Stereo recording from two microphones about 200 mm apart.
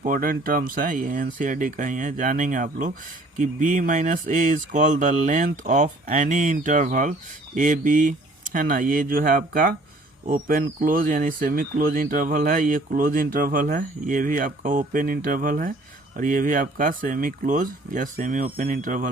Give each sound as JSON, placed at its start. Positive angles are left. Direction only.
{"t": 0.0, "sound": "speech", "side_deg": -45}